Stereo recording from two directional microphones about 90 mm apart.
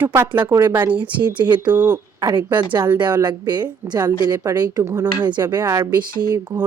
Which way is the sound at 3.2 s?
55° right (ahead or behind).